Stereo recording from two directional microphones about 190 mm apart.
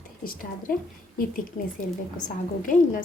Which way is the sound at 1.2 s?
50° left (ahead or behind).